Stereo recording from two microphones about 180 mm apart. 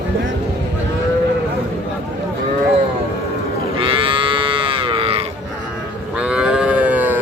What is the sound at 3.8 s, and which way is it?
Livestock, 30° right (ahead or behind).